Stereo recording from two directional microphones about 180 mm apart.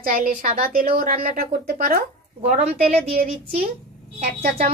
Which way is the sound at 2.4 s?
35° right (ahead or behind).